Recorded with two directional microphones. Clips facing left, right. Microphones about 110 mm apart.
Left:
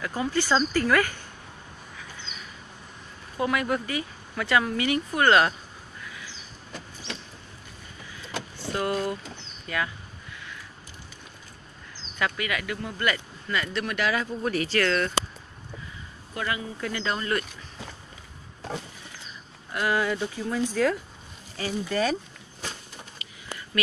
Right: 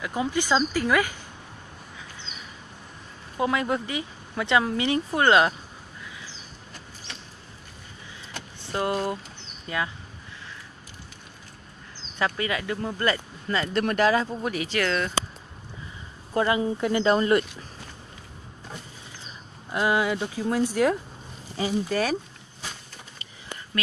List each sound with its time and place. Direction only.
0.0 s speech: 15° right (ahead or behind)
3.3 s speech: 25° right (ahead or behind)
6.0 s a sound: 20° right (ahead or behind)
8.7 s speech: 25° right (ahead or behind)
12.2 s speech: 30° right (ahead or behind)
13.7 s speech: 40° right (ahead or behind)
14.4 s speech: 10° right (ahead or behind)
16.3 s speech: 25° right (ahead or behind)
19.7 s speech: 20° right (ahead or behind)